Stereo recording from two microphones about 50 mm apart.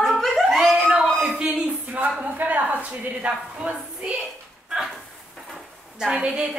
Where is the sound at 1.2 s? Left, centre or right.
Right.